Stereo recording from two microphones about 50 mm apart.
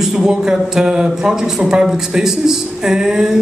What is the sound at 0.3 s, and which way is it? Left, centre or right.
A man's voice, centre.